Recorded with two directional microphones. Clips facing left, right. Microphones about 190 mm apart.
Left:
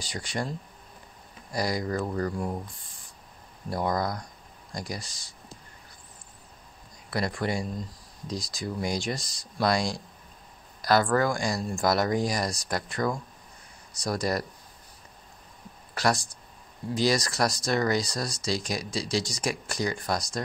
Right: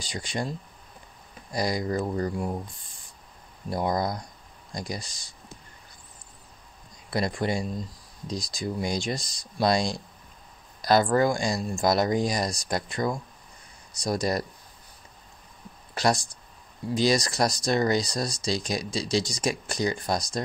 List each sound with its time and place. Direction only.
0.0 s speech: 15° right (ahead or behind)
1.5 s speech: 20° right (ahead or behind)
3.7 s speech: 20° right (ahead or behind)
7.1 s speech: 20° right (ahead or behind)
15.9 s speech: 20° right (ahead or behind)